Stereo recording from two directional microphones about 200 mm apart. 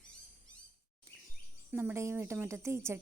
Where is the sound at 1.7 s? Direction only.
10° right (ahead or behind).